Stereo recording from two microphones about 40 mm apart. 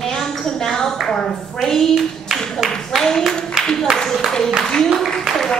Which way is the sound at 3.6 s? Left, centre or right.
Centre.